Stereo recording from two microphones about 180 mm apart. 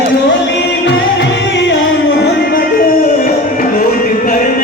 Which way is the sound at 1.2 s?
75° left (ahead or behind).